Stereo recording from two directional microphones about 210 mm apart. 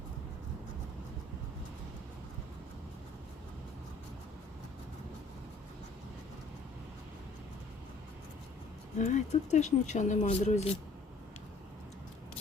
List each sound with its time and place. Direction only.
9.0 s speech: 35° left (ahead or behind)